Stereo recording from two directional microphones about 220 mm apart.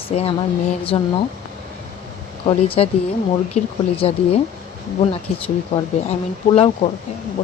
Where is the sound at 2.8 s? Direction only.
30° left (ahead or behind).